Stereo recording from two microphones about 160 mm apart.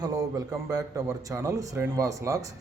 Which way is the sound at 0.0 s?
20° right (ahead or behind).